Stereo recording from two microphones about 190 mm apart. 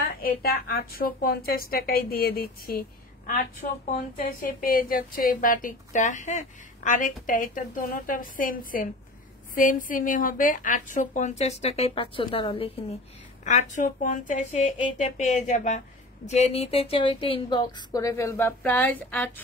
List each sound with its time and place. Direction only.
0.0 s a woman's voice: 50° left (ahead or behind); by 12.7 s 30° left (ahead or behind)
13.4 s a woman's voice: 40° left (ahead or behind); by 19.4 s 10° left (ahead or behind)